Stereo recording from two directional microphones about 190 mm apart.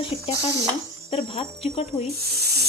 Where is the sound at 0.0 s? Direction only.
25° left (ahead or behind).